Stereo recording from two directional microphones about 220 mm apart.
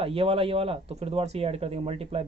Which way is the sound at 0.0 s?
25° right (ahead or behind).